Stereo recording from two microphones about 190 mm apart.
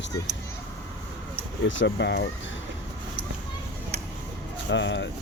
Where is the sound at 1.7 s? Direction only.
70° left (ahead or behind).